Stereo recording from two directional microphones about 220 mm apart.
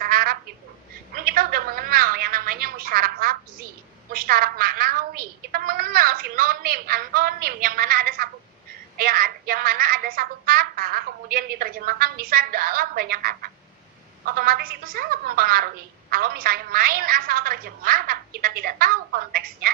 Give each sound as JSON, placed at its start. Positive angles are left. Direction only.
{"t": 0.0, "sound": "duck", "side_deg": -40}
{"t": 1.1, "sound": "a woman's voice", "side_deg": -40}